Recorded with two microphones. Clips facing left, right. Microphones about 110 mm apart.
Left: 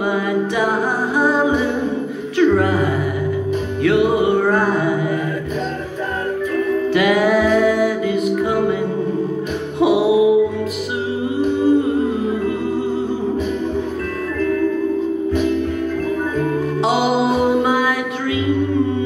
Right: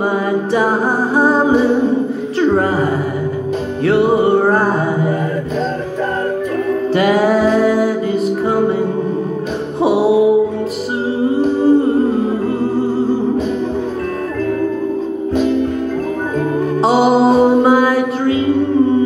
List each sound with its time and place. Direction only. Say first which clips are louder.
0.0 s music: right 2 dB; 40° right (ahead or behind)
6.9 s music: right 3 dB; 35° right (ahead or behind)
11.4 s humming: right 2 dB; 35° right (ahead or behind)
16.8 s mantra: right 6 dB; 40° right (ahead or behind)